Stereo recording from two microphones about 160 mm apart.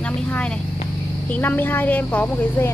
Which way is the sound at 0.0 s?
10° left (ahead or behind).